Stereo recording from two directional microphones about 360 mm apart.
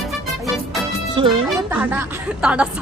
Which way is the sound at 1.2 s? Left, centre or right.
Centre.